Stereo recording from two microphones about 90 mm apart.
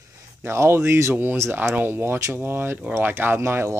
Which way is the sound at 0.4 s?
30° right (ahead or behind).